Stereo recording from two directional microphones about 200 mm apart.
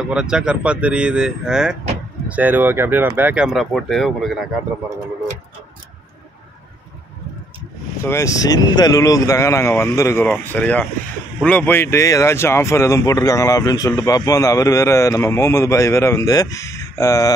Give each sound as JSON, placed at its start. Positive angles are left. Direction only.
{"t": 0.1, "sound": "speech", "side_deg": -5}
{"t": 8.0, "sound": "speech", "side_deg": 15}